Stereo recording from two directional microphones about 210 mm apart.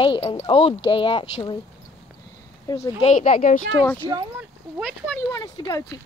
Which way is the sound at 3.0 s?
35° left (ahead or behind).